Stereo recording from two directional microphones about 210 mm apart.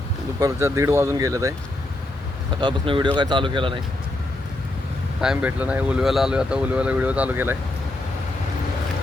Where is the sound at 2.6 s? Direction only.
25° right (ahead or behind).